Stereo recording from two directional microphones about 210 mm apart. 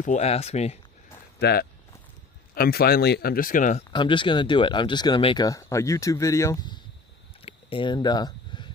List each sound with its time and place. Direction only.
0.0 s speech: 35° left (ahead or behind)
1.4 s speech: 50° left (ahead or behind)
3.9 s speech: 25° left (ahead or behind)
7.4 s a sound: 25° left (ahead or behind)